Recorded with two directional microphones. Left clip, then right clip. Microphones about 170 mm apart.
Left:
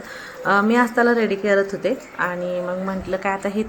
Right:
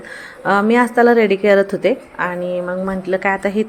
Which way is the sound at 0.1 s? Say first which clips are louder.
Right 3 dB; 15° right (ahead or behind).